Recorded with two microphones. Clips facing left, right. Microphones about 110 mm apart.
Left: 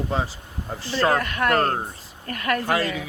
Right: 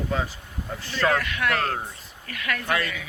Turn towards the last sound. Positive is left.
turn(degrees=35)  # may be behind; listen again after turning